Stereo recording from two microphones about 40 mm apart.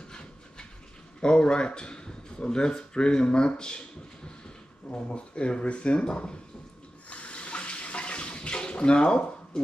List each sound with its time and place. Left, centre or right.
0.1 s train: left
1.2 s speech: left
4.9 s speech: left
7.1 s water tap: left